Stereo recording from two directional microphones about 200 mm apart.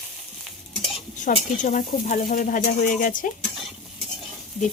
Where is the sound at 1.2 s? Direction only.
40° left (ahead or behind).